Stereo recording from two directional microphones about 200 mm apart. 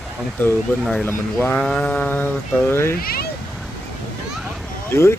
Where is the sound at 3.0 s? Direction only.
50° left (ahead or behind).